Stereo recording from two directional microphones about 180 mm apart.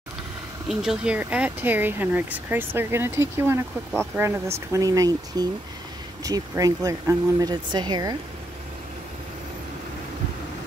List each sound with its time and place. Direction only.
0.7 s speech: 5° right (ahead or behind); by 8.2 s 20° right (ahead or behind)